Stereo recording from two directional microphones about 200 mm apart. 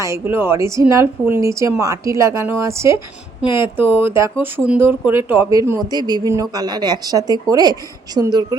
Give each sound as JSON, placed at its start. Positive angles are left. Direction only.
{"t": 0.0, "sound": "a woman's voice", "side_deg": -15}